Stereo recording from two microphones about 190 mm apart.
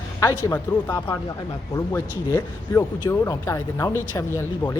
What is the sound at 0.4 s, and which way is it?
Speech, 20° left (ahead or behind).